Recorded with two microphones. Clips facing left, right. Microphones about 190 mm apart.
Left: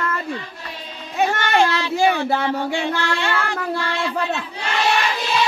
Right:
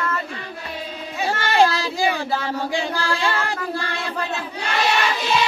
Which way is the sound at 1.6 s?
35° right (ahead or behind).